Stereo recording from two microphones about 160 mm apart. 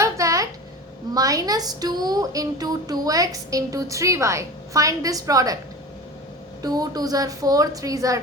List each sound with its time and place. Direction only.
0.0 s a sound: 20° right (ahead or behind)
1.1 s a woman's voice: 20° right (ahead or behind)
6.6 s a woman's voice: 25° right (ahead or behind)